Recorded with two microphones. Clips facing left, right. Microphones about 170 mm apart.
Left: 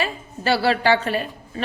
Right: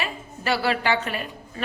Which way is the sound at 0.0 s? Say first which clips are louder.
Left 5 dB; 30° left (ahead or behind).